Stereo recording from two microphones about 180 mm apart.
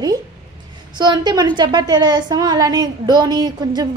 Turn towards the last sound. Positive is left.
turn(degrees=-20)  # may be behind; listen again after turning